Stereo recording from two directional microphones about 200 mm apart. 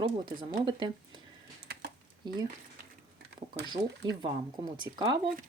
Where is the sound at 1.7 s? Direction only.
55° right (ahead or behind).